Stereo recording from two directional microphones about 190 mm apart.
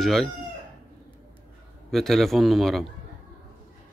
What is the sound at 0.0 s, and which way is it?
Chicken, centre (ahead or behind).